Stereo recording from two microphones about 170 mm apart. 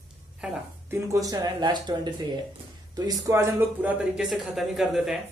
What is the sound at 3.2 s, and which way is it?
Speech, 15° right (ahead or behind).